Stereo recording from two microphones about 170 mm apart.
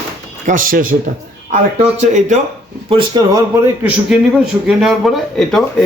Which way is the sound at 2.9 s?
25° right (ahead or behind).